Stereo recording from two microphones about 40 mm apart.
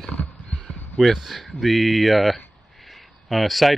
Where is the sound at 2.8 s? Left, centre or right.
Centre.